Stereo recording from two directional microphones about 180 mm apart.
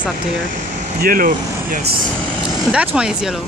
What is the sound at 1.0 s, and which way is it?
Speech, 50° right (ahead or behind).